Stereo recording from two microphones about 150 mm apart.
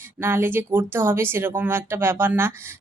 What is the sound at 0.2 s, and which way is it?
A woman's voice, 15° right (ahead or behind).